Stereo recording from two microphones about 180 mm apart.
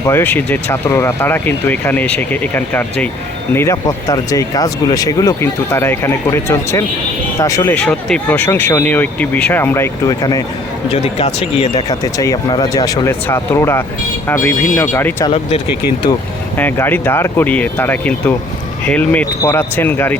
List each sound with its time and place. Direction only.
0.0 s speech: 15° left (ahead or behind)
10.9 s speech: 35° left (ahead or behind)
11.9 s speech: 20° left (ahead or behind)
15.3 s speech: 35° left (ahead or behind)
16.6 s speech: 10° left (ahead or behind)